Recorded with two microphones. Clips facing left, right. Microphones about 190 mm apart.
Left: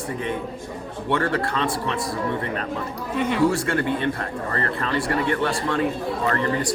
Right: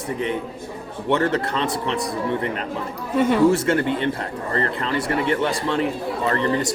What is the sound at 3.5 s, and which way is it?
Speech, 20° right (ahead or behind).